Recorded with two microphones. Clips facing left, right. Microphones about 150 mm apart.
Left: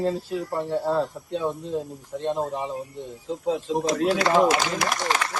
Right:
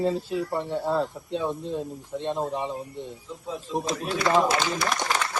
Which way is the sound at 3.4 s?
90° left.